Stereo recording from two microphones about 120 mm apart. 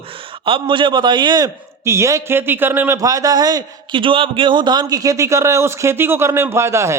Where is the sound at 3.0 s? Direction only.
30° right (ahead or behind).